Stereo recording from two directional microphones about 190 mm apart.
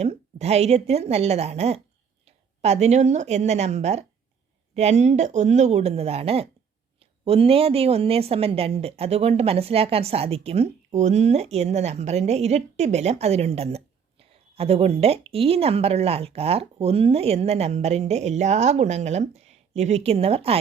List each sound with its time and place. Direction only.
0.0 s a woman's voice: 35° right (ahead or behind)